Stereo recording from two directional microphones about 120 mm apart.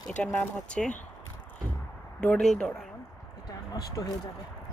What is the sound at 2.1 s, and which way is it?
Speech, 10° left (ahead or behind).